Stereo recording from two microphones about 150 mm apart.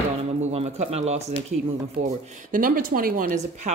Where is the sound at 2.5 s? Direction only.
70° right (ahead or behind).